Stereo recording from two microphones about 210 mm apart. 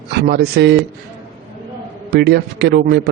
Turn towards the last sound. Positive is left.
turn(degrees=-50)  # may be behind; listen again after turning